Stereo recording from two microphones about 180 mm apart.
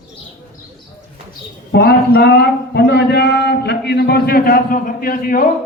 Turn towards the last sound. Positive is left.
turn(degrees=50)  # may be behind; listen again after turning